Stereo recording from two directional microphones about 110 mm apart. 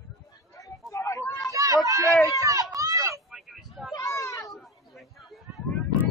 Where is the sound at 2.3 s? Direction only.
30° right (ahead or behind).